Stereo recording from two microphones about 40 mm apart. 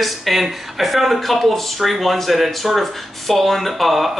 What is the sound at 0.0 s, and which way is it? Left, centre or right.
Speech, centre.